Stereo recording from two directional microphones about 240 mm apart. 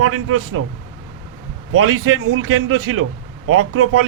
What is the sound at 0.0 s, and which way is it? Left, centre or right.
Speech, right.